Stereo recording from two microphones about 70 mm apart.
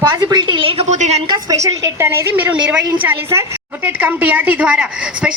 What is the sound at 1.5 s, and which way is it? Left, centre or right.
Speech, right.